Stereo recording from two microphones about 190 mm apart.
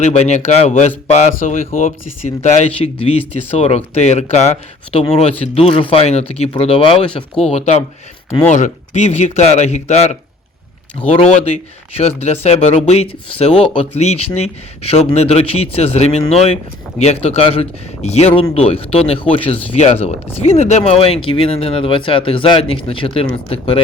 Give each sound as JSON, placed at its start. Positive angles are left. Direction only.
{"t": 0.0, "sound": "speech", "side_deg": 35}